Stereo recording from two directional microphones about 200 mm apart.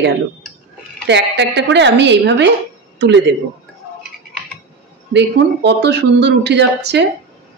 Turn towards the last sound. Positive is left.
turn(degrees=-60)  # may be behind; listen again after turning